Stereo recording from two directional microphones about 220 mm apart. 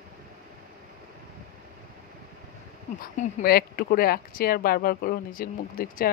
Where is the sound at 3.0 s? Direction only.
40° left (ahead or behind).